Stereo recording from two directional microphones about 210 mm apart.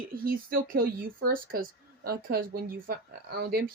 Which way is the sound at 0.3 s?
45° right (ahead or behind).